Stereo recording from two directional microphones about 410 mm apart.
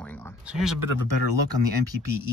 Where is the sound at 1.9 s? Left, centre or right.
Right.